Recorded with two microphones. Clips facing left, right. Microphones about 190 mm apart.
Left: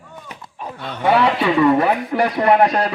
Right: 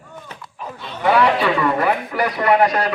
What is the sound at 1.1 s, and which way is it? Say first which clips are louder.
Speech: left 1 dB; 25° left (ahead or behind).